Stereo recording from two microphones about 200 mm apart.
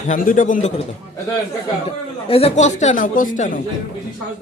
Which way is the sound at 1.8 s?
30° left (ahead or behind).